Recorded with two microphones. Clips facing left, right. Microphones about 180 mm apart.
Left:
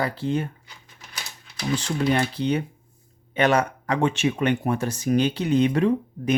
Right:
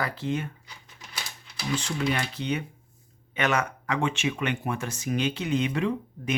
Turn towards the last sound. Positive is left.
turn(degrees=40)  # may be behind; listen again after turning